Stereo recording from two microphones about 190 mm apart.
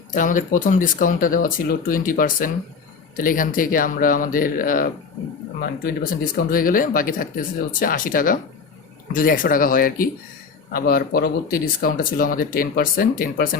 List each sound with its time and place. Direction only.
0.1 s speech: 45° left (ahead or behind)